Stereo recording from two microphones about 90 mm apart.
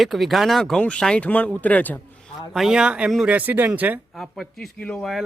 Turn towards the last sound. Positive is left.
turn(degrees=15)  # may be behind; listen again after turning